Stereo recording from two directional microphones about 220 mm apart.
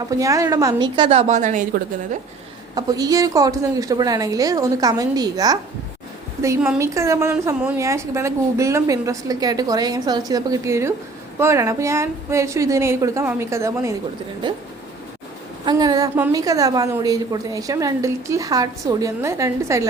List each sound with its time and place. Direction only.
0.2 s a woman's voice: 15° right (ahead or behind); by 1.8 s 35° right (ahead or behind)
2.7 s a woman's voice: 15° right (ahead or behind)
15.6 s a woman's voice: 15° right (ahead or behind)